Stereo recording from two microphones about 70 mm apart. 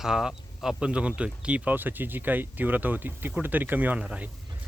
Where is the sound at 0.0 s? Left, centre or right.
Centre.